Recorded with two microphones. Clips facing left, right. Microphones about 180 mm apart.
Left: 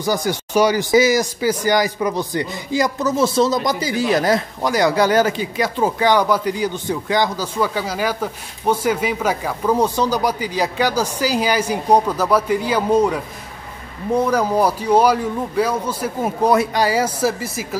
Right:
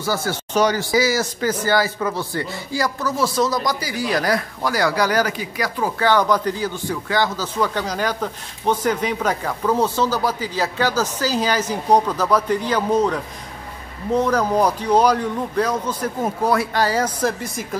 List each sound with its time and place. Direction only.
0.0 s a man's voice: 15° left (ahead or behind)